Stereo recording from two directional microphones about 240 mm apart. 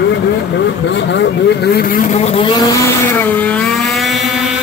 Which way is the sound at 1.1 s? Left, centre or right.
Left.